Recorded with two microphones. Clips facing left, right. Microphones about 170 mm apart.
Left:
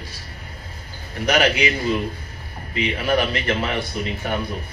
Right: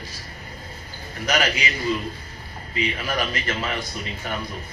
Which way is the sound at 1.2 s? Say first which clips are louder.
Left 5 dB; 60° left (ahead or behind).